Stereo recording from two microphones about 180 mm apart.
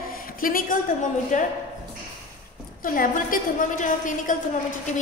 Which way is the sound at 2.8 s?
50° left (ahead or behind).